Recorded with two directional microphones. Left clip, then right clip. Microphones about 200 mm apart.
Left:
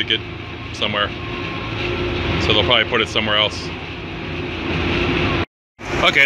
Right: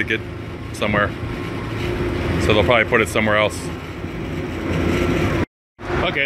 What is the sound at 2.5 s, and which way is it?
Speech, 20° right (ahead or behind).